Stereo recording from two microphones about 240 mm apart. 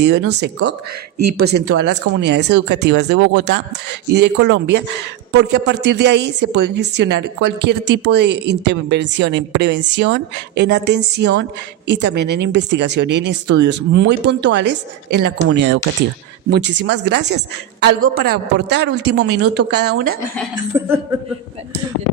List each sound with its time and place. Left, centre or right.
0.0 s a woman's voice: right
20.7 s a woman's voice: centre